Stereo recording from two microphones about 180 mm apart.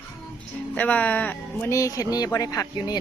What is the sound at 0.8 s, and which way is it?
Speech, 10° left (ahead or behind).